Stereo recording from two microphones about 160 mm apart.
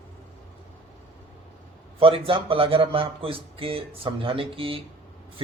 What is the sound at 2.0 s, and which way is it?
Speech, 35° right (ahead or behind).